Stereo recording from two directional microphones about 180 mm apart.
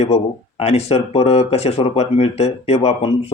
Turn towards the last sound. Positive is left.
turn(degrees=35)  # may be behind; listen again after turning